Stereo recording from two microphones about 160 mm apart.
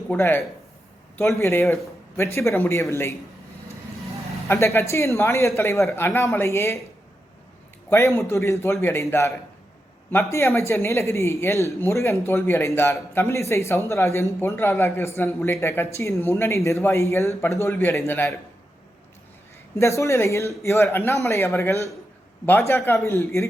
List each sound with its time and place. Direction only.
0.1 s speech: 15° left (ahead or behind)
4.4 s speech: 15° left (ahead or behind)
7.9 s speech: 15° left (ahead or behind)
19.8 s speech: 20° left (ahead or behind)